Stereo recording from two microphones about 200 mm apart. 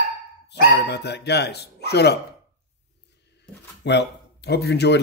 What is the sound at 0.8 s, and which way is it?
A man's voice, 55° left (ahead or behind).